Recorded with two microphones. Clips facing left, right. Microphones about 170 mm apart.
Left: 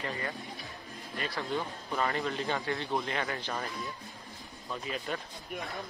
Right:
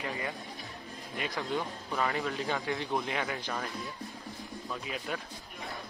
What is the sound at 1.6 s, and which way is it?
A man's voice, centre (ahead or behind).